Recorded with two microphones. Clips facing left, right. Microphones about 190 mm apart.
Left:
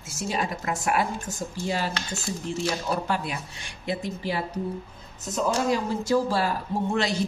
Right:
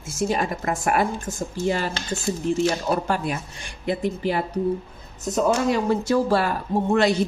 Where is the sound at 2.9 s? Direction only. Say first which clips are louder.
Right 4 dB; 50° right (ahead or behind).